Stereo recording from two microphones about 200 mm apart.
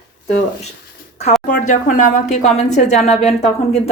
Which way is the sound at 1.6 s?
40° left (ahead or behind).